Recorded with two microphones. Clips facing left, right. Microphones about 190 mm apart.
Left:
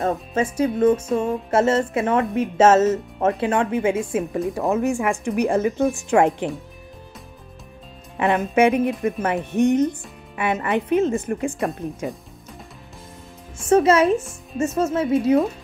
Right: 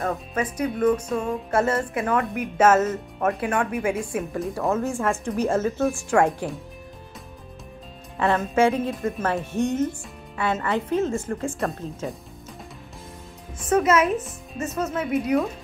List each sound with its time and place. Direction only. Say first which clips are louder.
0.0 s a woman's voice: left 4 dB; 25° left (ahead or behind)
8.2 s a woman's voice: left 3 dB; 20° left (ahead or behind)
13.7 s a woman's voice: left 4 dB; 30° left (ahead or behind)